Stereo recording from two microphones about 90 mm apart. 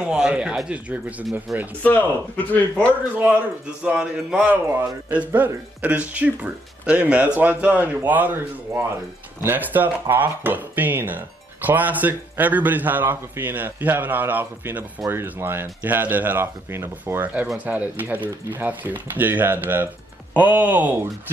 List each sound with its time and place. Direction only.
0.0 s speech: 10° right (ahead or behind)
1.8 s speech: 20° left (ahead or behind)
3.8 s speech: 10° right (ahead or behind)
9.4 s speech: 20° right (ahead or behind)